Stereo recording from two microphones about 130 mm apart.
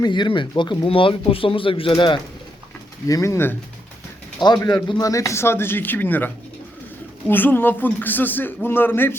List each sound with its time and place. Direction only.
0.0 s speech: 35° left (ahead or behind)
3.1 s a man's voice: 25° left (ahead or behind)